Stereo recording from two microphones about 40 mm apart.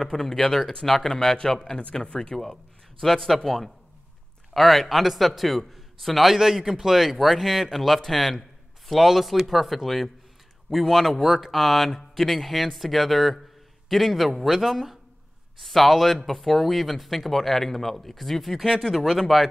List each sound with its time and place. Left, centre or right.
0.0 s a man's voice: centre
6.3 s speech: centre